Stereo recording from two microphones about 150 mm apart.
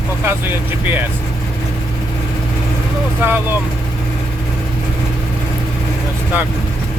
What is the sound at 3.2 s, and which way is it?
Speech, 15° right (ahead or behind).